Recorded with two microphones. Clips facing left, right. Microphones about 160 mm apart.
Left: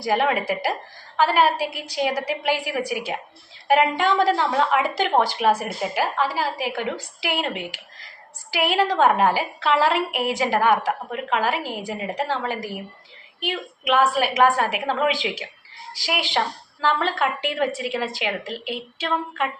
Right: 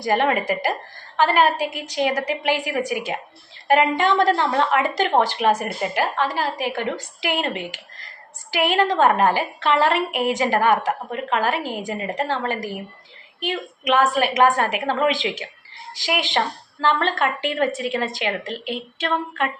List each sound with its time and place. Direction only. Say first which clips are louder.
0.0 s a woman's voice: right 1 dB; 5° left (ahead or behind)